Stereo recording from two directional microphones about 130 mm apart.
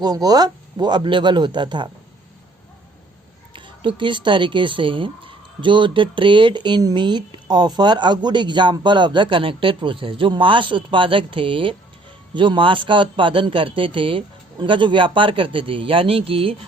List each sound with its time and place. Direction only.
0.0 s speech: 30° right (ahead or behind)
3.5 s speech: 40° right (ahead or behind)